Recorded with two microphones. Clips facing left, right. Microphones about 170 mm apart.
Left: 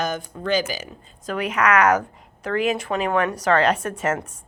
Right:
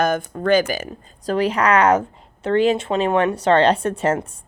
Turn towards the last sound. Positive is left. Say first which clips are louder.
# right 4 dB
turn(degrees=-30)  # may be behind; listen again after turning